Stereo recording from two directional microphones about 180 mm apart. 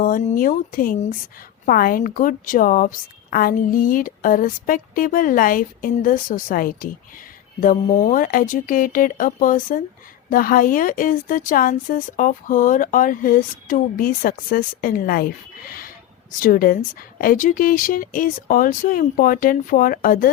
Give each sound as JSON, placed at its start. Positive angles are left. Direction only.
{"t": 0.0, "sound": "a woman's voice", "side_deg": 50}
{"t": 16.4, "sound": "a woman's voice", "side_deg": 50}